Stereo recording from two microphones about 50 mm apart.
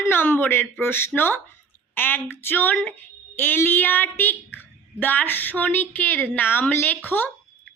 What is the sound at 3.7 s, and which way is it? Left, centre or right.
Speech, left.